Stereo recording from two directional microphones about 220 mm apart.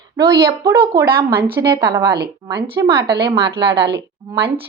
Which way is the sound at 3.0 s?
50° right (ahead or behind).